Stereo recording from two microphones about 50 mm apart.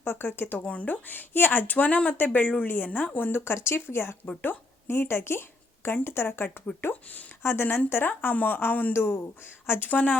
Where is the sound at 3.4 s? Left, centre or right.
Left.